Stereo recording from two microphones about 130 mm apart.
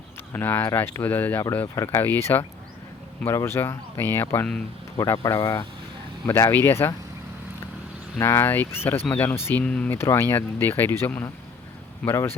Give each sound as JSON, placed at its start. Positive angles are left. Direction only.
{"t": 0.3, "sound": "speech", "side_deg": 15}
{"t": 8.2, "sound": "speech", "side_deg": 20}